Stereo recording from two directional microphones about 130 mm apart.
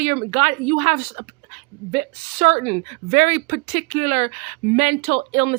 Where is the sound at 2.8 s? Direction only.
60° right (ahead or behind).